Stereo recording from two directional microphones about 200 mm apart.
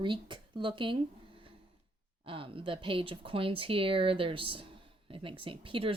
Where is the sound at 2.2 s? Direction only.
25° right (ahead or behind).